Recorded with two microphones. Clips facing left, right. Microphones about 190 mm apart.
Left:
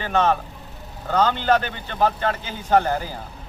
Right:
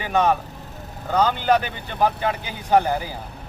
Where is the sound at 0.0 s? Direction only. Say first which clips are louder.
Even; 10° right (ahead or behind).